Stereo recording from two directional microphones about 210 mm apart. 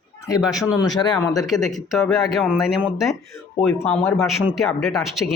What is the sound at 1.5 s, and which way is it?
Speech, centre (ahead or behind).